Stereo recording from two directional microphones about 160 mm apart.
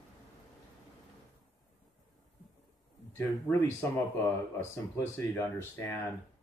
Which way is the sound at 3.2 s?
15° left (ahead or behind).